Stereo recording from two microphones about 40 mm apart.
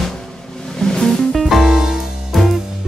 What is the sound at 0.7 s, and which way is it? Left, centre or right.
Music, centre.